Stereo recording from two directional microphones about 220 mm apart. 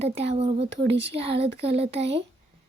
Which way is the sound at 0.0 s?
30° right (ahead or behind).